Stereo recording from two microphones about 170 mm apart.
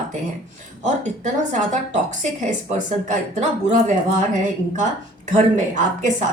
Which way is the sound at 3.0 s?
45° right (ahead or behind).